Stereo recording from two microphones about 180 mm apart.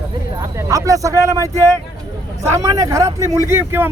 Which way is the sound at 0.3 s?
20° right (ahead or behind).